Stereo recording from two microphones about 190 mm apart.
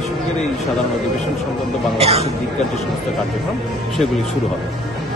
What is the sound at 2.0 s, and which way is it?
Speech, 30° right (ahead or behind).